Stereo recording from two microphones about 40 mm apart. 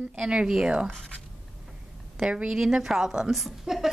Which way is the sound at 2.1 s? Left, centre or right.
Right.